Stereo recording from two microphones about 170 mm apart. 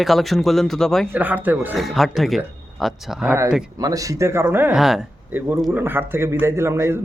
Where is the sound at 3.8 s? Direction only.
20° right (ahead or behind).